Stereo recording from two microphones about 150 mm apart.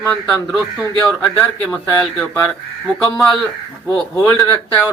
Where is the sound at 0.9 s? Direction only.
5° left (ahead or behind).